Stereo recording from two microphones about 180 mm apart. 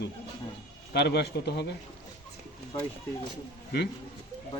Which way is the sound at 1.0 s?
65° left (ahead or behind).